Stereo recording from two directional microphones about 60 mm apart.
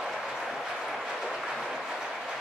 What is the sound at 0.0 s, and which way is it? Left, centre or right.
Train, centre.